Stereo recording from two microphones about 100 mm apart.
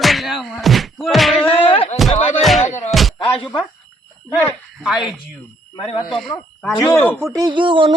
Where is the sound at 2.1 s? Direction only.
90° left.